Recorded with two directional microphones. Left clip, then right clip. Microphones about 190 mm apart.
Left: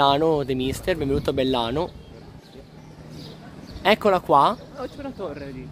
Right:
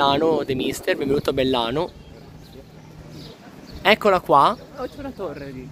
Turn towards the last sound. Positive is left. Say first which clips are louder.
# right 1 dB
turn(degrees=-60)  # may be behind; listen again after turning